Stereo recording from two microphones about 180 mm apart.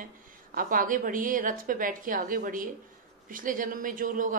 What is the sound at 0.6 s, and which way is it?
A woman's voice, 50° right (ahead or behind).